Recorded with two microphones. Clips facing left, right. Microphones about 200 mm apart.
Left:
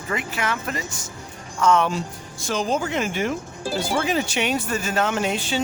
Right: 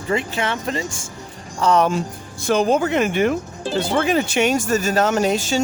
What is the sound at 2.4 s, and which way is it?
Speech, 60° right (ahead or behind).